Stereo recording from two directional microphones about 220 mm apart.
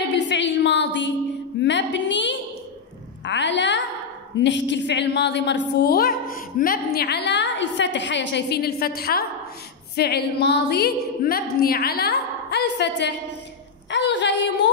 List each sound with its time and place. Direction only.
0.1 s a sound: 55° left (ahead or behind)
1.6 s music: 55° left (ahead or behind)
3.3 s a woman's voice: 55° left (ahead or behind)